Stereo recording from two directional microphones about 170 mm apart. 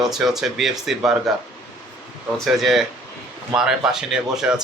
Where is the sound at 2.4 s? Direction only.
Centre (ahead or behind).